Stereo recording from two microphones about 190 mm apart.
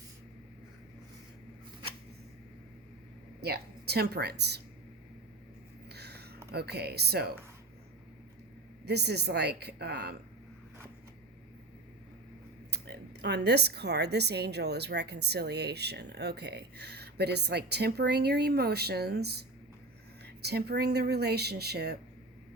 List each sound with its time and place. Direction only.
3.4 s a woman's voice: 55° right (ahead or behind)
5.9 s a sound: 60° right (ahead or behind)
6.5 s a woman's voice: 60° right (ahead or behind)
8.8 s a woman's voice: 60° right (ahead or behind)
12.7 s a woman's voice: 60° right (ahead or behind)